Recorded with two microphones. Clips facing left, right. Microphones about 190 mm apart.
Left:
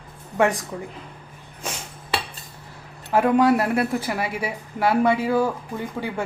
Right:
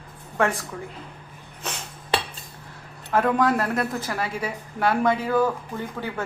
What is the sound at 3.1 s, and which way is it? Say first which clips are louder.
A woman's voice: left 4 dB; 10° left (ahead or behind).